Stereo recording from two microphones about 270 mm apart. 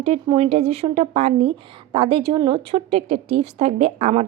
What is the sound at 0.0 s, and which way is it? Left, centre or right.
A woman's voice, right.